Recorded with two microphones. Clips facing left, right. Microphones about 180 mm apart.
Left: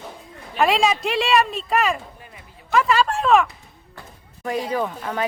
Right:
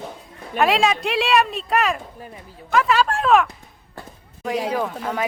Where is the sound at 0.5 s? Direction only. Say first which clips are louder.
Even; centre (ahead or behind).